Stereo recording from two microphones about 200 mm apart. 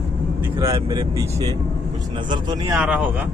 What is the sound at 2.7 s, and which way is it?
Speech, 5° right (ahead or behind).